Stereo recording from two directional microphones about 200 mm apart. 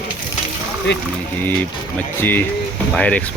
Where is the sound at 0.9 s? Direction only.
60° left (ahead or behind).